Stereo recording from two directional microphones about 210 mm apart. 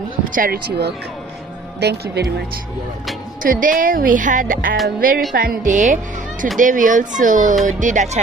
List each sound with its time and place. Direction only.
0.3 s speech: 45° right (ahead or behind)